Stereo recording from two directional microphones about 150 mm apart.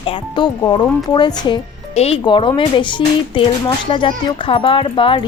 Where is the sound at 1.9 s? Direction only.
40° left (ahead or behind).